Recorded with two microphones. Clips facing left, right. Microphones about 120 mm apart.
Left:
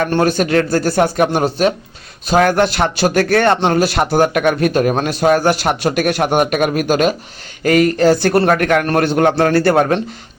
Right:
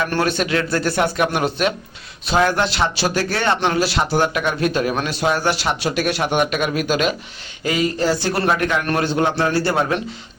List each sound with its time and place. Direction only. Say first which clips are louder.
0.1 s a man's voice: left 5 dB; 40° left (ahead or behind)
7.6 s a man's voice: left 8 dB; 60° left (ahead or behind)